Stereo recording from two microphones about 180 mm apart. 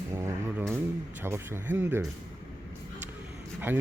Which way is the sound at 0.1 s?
15° right (ahead or behind).